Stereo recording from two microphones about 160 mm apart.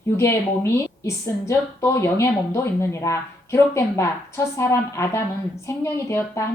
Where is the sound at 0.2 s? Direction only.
20° left (ahead or behind).